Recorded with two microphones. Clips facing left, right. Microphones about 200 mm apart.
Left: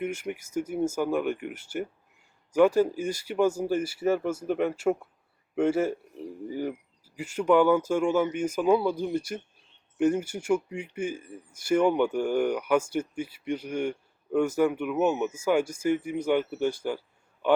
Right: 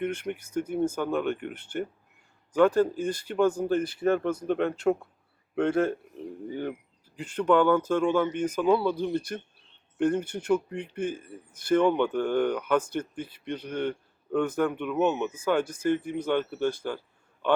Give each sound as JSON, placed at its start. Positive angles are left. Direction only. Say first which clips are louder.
{"t": 0.0, "sound": "speech", "louder": "right 1 dB", "side_deg": 10}